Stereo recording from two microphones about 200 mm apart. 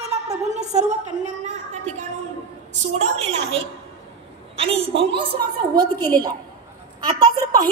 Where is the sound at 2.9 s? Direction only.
35° right (ahead or behind).